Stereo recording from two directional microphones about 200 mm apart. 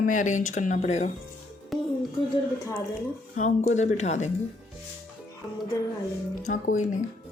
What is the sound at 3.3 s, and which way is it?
Speech, 40° left (ahead or behind).